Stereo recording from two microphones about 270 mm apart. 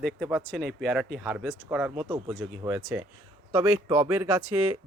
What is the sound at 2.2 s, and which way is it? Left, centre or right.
Speech, centre.